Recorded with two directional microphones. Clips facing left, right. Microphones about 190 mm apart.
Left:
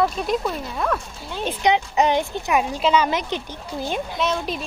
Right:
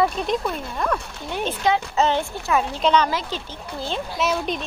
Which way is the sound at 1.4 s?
15° left (ahead or behind).